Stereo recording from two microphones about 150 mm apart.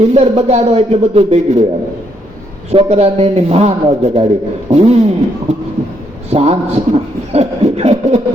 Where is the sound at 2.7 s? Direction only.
45° right (ahead or behind).